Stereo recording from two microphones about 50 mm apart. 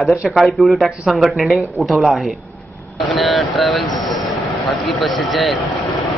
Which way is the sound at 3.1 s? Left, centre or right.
Centre.